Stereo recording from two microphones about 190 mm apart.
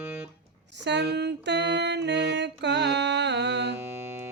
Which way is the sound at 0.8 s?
65° right (ahead or behind).